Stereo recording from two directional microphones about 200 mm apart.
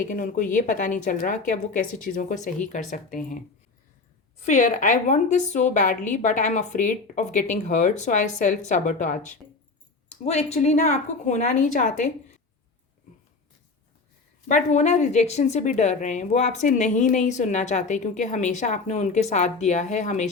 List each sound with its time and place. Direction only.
0.0 s a woman's voice: 40° left (ahead or behind)
14.4 s a woman's voice: 35° left (ahead or behind)